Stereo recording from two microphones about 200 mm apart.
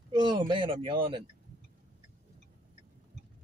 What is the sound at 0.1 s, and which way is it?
Speech, 25° right (ahead or behind).